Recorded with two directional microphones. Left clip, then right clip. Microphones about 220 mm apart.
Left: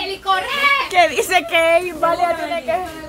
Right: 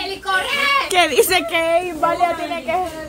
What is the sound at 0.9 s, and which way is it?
Speech, 15° right (ahead or behind).